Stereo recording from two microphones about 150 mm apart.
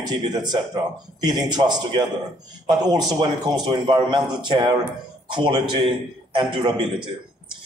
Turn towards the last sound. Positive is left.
turn(degrees=-30)  # may be behind; listen again after turning